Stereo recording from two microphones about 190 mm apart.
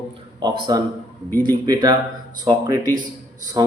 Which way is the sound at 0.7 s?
20° right (ahead or behind).